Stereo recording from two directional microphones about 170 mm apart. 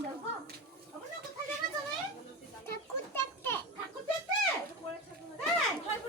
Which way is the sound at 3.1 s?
15° left (ahead or behind).